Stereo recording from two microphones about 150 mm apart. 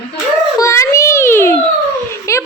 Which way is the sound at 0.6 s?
20° left (ahead or behind).